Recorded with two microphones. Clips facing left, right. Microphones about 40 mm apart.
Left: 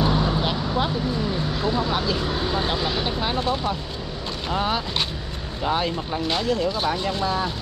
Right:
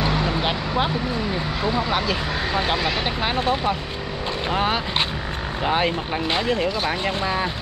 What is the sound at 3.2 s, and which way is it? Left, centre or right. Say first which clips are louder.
Speech: right 2 dB; right.